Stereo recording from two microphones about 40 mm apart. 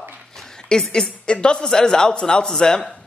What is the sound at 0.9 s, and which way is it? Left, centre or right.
Speech, left.